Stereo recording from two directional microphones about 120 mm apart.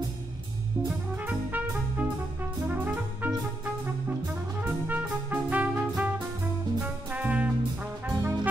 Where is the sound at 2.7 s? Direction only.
15° right (ahead or behind).